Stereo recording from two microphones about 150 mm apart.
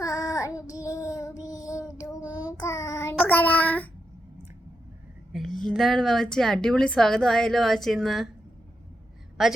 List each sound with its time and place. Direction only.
0.0 s child singing: 25° left (ahead or behind)
3.2 s child singing: 10° left (ahead or behind)
5.3 s a woman's voice: centre (ahead or behind)
9.4 s a woman's voice: centre (ahead or behind)